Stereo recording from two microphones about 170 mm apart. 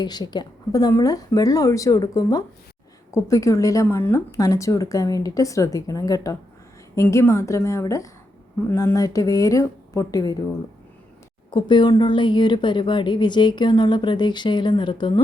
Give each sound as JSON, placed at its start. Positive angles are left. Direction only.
{"t": 0.0, "sound": "a woman's voice", "side_deg": 25}
{"t": 11.5, "sound": "a woman's voice", "side_deg": 25}